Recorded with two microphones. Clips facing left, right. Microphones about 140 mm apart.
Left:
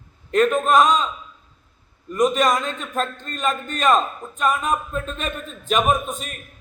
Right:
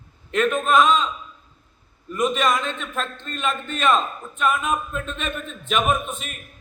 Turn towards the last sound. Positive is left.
turn(degrees=40)  # may be behind; listen again after turning